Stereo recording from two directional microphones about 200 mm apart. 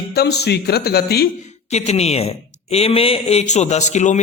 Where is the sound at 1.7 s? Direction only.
30° left (ahead or behind).